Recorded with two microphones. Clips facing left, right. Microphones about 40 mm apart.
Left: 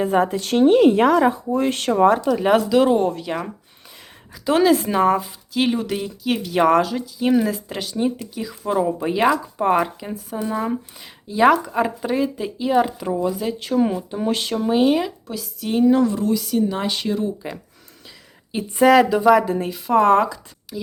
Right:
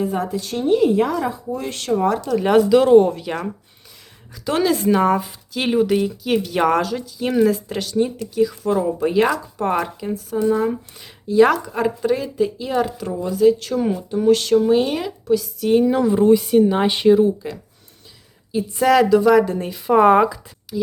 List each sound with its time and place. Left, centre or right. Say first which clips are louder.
0.0 s a woman's voice: left 4 dB; left
1.5 s speech: left 3 dB; left
2.2 s speech: right 1 dB; centre
14.5 s speech: right 2 dB; centre
16.1 s speech: right 7 dB; right
17.4 s speech: right 1 dB; centre
18.5 s speech: right 4 dB; left
19.0 s speech: right 3 dB; centre
19.3 s speech: even; centre
19.9 s speech: right 2 dB; centre
20.7 s speech: right 8 dB; centre